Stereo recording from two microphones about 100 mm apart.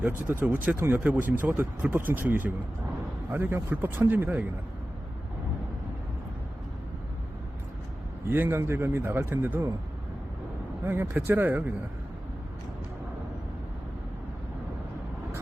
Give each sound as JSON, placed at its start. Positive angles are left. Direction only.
{"t": 0.0, "sound": "speech", "side_deg": -20}
{"t": 8.3, "sound": "speech", "side_deg": -20}
{"t": 10.8, "sound": "speech", "side_deg": -20}